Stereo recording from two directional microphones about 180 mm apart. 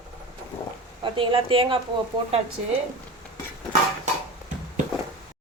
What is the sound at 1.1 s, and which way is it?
Speech, 30° right (ahead or behind).